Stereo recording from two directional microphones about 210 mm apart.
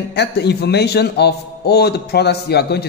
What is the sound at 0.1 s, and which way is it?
A man's voice, 50° left (ahead or behind).